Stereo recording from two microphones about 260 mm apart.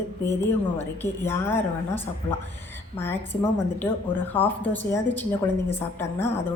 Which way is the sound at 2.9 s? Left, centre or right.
Centre.